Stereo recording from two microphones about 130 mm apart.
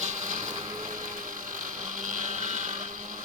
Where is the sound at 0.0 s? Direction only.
70° right (ahead or behind).